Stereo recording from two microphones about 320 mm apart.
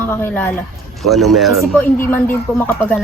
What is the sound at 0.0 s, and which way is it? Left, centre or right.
A woman's voice, centre.